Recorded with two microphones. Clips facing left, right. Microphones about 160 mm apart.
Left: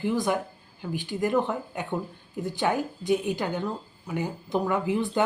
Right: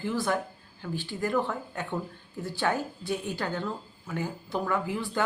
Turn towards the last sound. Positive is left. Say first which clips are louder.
# left 5 dB
turn(degrees=20)  # may be behind; listen again after turning